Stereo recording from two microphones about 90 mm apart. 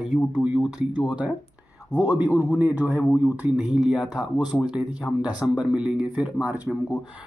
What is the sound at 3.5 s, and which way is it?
Speech, 10° right (ahead or behind).